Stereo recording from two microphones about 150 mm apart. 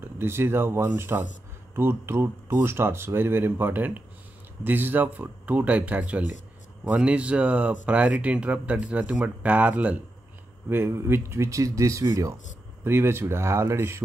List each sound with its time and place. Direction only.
0.0 s speech: 15° right (ahead or behind)